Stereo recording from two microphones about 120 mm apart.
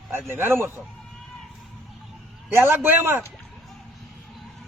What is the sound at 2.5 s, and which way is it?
Speech, 20° right (ahead or behind).